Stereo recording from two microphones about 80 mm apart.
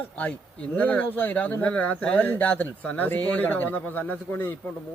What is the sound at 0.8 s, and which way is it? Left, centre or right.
Speech, centre.